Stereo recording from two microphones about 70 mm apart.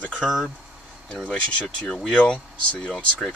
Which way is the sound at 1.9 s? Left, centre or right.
Centre.